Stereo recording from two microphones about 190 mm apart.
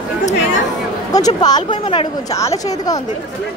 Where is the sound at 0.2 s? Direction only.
40° left (ahead or behind).